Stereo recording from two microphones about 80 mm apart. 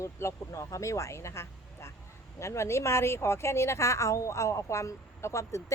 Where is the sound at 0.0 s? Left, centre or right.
Left.